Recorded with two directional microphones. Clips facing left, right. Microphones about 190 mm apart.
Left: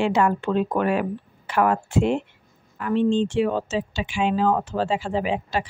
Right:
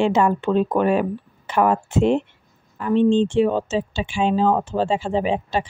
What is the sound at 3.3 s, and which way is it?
Speech, 25° right (ahead or behind).